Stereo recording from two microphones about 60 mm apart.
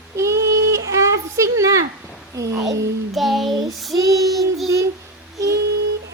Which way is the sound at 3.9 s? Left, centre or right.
Right.